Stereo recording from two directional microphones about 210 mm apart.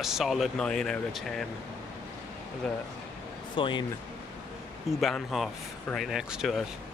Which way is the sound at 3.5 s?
20° left (ahead or behind).